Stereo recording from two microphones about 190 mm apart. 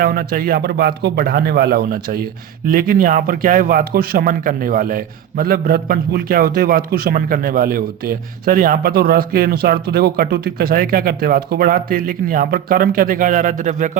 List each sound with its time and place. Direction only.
0.0 s speech: 50° right (ahead or behind)